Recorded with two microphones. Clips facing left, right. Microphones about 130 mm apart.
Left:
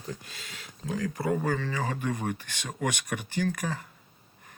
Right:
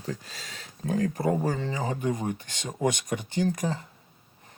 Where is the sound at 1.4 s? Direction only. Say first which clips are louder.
Right 1 dB; 25° right (ahead or behind).